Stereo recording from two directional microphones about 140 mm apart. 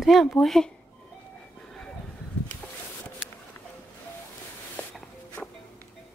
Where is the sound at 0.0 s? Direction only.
Centre (ahead or behind).